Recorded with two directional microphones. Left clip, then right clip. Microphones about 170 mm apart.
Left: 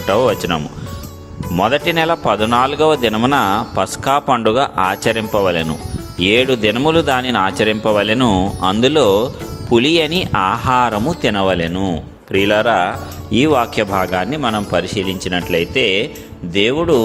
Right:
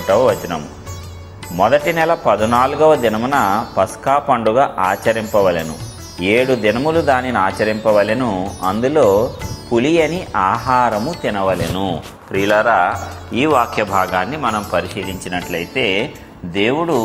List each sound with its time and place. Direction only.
0.1 s speech: 75° left (ahead or behind)
1.6 s speech: 55° left (ahead or behind); by 3.3 s 80° left
3.3 s speech: 55° left (ahead or behind)
9.8 s speech: 70° left (ahead or behind)
11.7 s speech: 45° left (ahead or behind)
12.5 s speech: 70° left (ahead or behind)
13.9 s speech: 60° left (ahead or behind); by 16.0 s 90° left
16.6 s speech: 55° left (ahead or behind)